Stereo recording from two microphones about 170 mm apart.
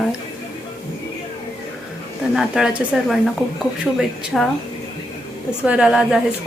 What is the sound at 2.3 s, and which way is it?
Speech, 5° right (ahead or behind).